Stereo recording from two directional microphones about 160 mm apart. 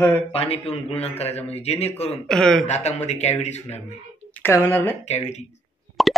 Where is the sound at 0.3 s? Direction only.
35° left (ahead or behind).